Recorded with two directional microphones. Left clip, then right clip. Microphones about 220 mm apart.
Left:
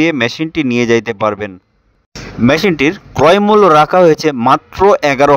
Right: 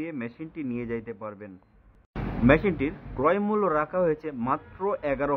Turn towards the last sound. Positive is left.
turn(degrees=50)  # may be behind; listen again after turning